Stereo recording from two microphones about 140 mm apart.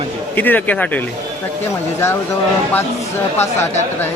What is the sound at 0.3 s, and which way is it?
Speech, 10° left (ahead or behind).